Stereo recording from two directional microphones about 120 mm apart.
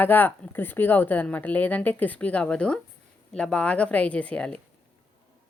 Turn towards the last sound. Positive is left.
turn(degrees=10)  # may be behind; listen again after turning